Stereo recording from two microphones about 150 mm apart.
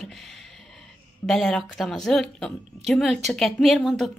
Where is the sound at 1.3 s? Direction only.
Centre (ahead or behind).